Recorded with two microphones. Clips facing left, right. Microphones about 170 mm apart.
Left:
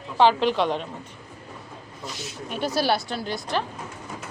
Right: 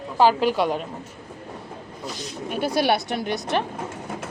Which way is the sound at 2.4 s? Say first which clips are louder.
Right 2 dB; 10° right (ahead or behind).